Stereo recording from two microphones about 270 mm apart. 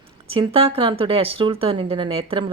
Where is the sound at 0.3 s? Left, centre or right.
Right.